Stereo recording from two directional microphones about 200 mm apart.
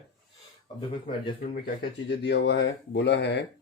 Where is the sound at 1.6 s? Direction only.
55° left (ahead or behind).